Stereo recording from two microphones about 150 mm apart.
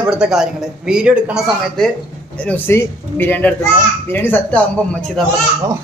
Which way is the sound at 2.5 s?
15° left (ahead or behind).